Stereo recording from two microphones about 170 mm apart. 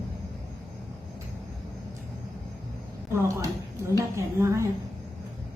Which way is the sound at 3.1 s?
15° right (ahead or behind).